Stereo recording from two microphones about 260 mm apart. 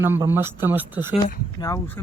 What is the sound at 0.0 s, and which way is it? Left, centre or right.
Speech, centre.